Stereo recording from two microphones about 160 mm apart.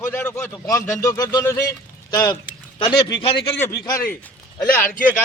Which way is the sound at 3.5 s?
15° left (ahead or behind).